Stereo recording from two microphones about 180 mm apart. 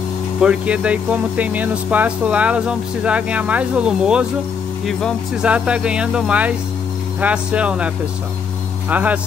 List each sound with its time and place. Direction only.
0.4 s speech: 5° right (ahead or behind)